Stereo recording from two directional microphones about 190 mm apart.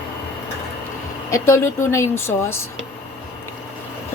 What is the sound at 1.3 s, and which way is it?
A woman's voice, 15° left (ahead or behind).